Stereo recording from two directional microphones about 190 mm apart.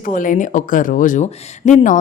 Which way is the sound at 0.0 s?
45° left (ahead or behind).